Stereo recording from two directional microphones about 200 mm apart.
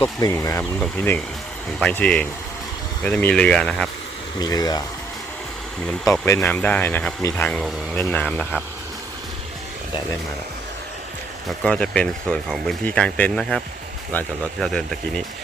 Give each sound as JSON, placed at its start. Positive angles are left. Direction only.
{"t": 0.0, "sound": "speech", "side_deg": 15}
{"t": 4.4, "sound": "speech", "side_deg": 20}
{"t": 6.2, "sound": "speech", "side_deg": 10}
{"t": 11.6, "sound": "speech", "side_deg": 5}